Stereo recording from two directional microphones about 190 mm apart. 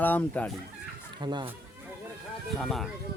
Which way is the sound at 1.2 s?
25° right (ahead or behind).